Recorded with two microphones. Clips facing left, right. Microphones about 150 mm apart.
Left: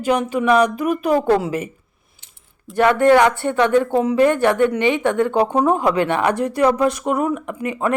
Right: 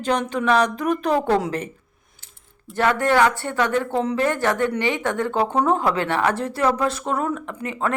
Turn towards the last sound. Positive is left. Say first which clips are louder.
# left 4 dB
turn(degrees=15)  # may be behind; listen again after turning